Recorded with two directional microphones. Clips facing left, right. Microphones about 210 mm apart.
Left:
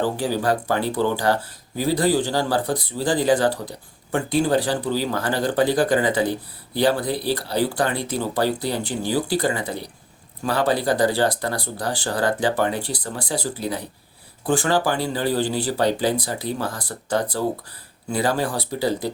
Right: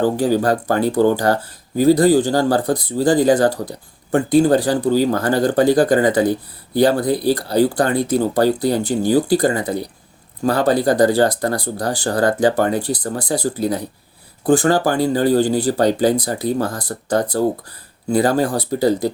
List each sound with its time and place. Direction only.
0.0 s speech: 45° right (ahead or behind)